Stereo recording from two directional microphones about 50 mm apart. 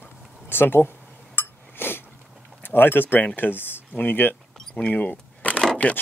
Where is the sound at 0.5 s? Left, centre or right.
Left.